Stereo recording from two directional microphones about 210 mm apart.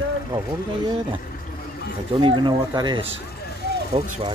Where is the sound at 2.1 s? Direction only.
20° right (ahead or behind).